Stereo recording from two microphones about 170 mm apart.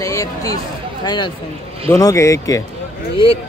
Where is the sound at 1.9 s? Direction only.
15° left (ahead or behind).